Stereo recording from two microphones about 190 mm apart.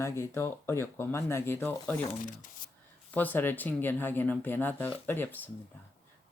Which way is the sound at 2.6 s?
45° left (ahead or behind).